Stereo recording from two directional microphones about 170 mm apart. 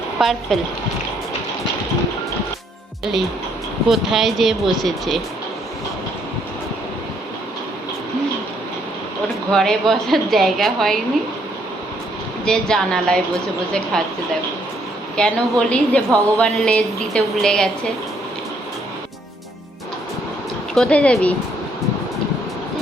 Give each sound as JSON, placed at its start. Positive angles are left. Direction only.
{"t": 0.2, "sound": "a woman's voice", "side_deg": 0}
{"t": 3.0, "sound": "a woman's voice", "side_deg": 0}
{"t": 9.5, "sound": "a woman's voice", "side_deg": 5}
{"t": 12.5, "sound": "a woman's voice", "side_deg": 5}
{"t": 15.1, "sound": "a woman's voice", "side_deg": 5}
{"t": 20.7, "sound": "speech", "side_deg": 5}